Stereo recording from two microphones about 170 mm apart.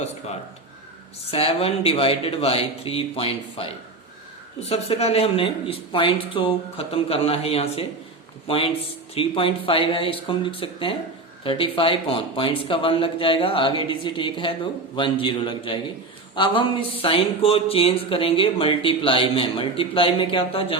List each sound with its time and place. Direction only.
1.3 s speech: 35° left (ahead or behind)